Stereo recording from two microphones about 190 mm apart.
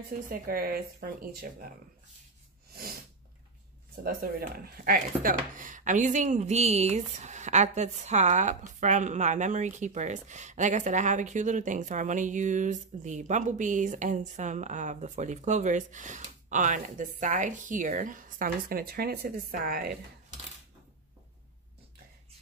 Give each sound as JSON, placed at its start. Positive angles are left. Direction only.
{"t": 0.3, "sound": "speech", "side_deg": -50}
{"t": 2.7, "sound": "sneeze", "side_deg": -50}
{"t": 4.0, "sound": "speech", "side_deg": -50}